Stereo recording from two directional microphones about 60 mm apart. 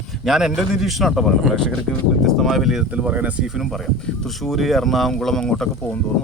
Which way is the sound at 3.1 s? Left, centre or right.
Right.